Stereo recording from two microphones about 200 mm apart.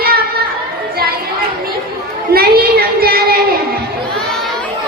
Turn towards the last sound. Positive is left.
turn(degrees=-50)  # may be behind; listen again after turning